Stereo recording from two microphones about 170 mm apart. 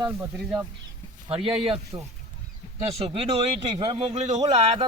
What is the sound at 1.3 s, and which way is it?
Speech, 35° right (ahead or behind).